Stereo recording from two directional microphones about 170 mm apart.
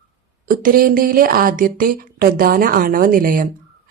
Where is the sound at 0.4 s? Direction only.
55° right (ahead or behind).